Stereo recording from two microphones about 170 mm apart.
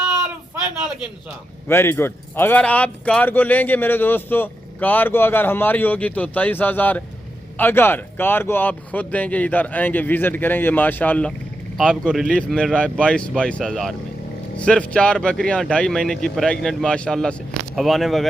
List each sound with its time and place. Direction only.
1.6 s speech: 15° left (ahead or behind)